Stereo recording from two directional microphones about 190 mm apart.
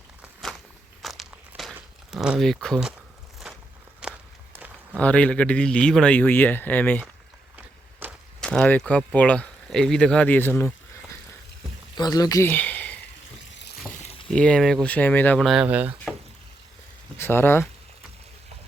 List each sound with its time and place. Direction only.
1.0 s crumpling: centre (ahead or behind)
4.0 s walk: 5° right (ahead or behind)
4.9 s speech: 5° left (ahead or behind)
7.5 s a sound: 10° right (ahead or behind)
8.4 s speech: 5° left (ahead or behind)
11.9 s speech: 20° left (ahead or behind)
13.9 s frying: 35° left (ahead or behind)
14.3 s speech: 5° left (ahead or behind)
17.2 s speech: 10° left (ahead or behind)